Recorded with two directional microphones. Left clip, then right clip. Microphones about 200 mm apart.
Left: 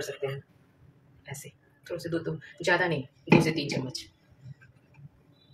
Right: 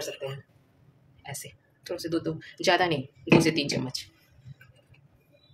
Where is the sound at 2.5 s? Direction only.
50° right (ahead or behind).